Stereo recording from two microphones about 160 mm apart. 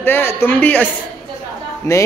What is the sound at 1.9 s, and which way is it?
Speech, 20° left (ahead or behind).